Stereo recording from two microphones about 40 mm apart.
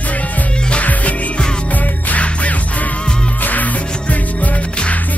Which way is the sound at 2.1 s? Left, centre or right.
Left.